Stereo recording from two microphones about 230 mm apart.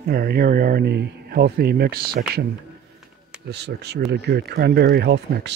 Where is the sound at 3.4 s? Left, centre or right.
Right.